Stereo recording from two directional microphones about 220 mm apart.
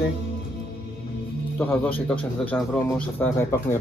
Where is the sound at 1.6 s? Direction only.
5° left (ahead or behind).